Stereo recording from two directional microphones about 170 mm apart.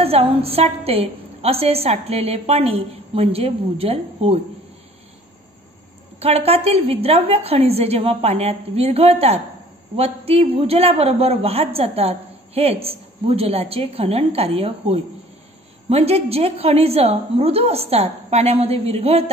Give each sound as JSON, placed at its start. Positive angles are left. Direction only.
{"t": 0.0, "sound": "a woman's voice", "side_deg": -35}
{"t": 6.1, "sound": "a woman's voice", "side_deg": -35}